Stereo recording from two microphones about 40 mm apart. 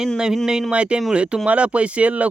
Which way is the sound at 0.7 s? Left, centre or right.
Right.